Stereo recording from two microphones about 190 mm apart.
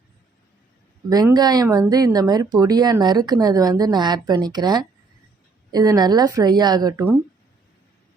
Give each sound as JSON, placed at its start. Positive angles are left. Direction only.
{"t": 1.1, "sound": "speech", "side_deg": -20}